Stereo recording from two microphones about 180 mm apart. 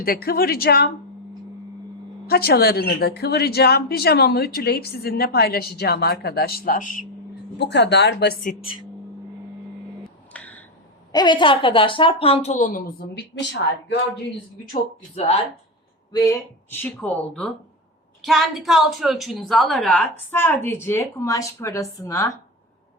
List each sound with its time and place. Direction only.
0.0 s a woman's voice: 55° left (ahead or behind)
2.2 s a woman's voice: 60° left (ahead or behind)
7.6 s speech: 70° left (ahead or behind)
8.6 s speech: 30° left (ahead or behind)
10.0 s a sound: 10° left (ahead or behind)
11.1 s a woman's voice: 25° left (ahead or behind); by 13.9 s 80° left
15.1 s a woman's voice: 35° left (ahead or behind)
16.7 s a woman's voice: 5° left (ahead or behind)